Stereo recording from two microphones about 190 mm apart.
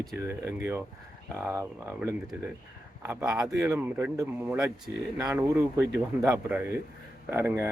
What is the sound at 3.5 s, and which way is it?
Speech, 15° right (ahead or behind).